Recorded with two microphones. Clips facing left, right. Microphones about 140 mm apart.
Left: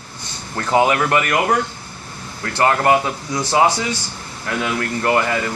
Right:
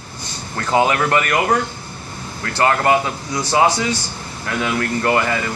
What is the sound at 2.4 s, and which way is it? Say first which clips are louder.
Speech: even; 15° left (ahead or behind).